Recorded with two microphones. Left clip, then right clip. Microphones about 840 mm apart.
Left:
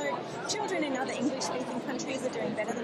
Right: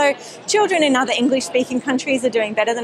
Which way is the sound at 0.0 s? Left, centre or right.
Right.